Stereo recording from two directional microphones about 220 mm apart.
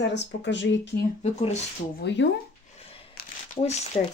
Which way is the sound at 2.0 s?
55° left (ahead or behind).